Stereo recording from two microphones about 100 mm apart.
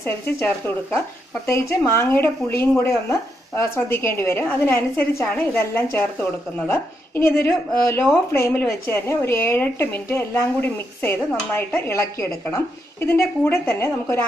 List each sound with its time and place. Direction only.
0.0 s a woman's voice: 25° left (ahead or behind)